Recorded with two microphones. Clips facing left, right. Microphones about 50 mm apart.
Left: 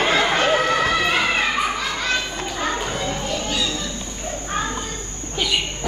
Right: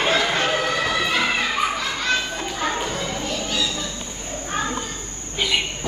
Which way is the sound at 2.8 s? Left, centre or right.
Left.